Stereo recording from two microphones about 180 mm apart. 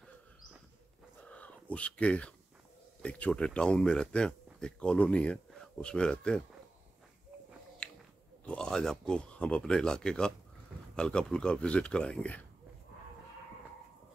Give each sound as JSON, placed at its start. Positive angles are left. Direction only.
{"t": 1.3, "sound": "speech", "side_deg": 5}
{"t": 7.8, "sound": "biting", "side_deg": 5}
{"t": 8.5, "sound": "speech", "side_deg": 5}